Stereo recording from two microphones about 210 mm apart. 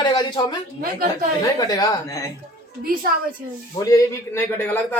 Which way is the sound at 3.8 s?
15° left (ahead or behind).